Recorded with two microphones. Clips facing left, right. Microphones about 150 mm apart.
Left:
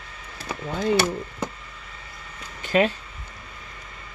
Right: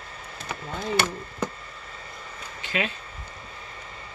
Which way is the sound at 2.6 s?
45° left (ahead or behind).